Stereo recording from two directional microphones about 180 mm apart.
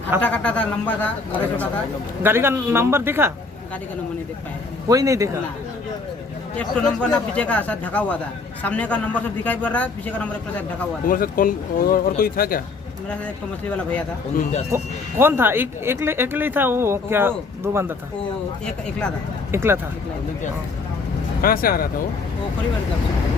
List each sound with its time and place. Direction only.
0.2 s a man's voice: 10° left (ahead or behind)
2.2 s speech: 15° right (ahead or behind)
4.9 s speech: 20° right (ahead or behind)
6.6 s a man's voice: 5° left (ahead or behind)
11.0 s speech: 50° left (ahead or behind)
13.2 s a man's voice: 5° left (ahead or behind)
14.7 s speech: 15° right (ahead or behind)
18.6 s speech: 5° left (ahead or behind)
19.5 s speech: 15° right (ahead or behind)
21.4 s speech: 55° left (ahead or behind)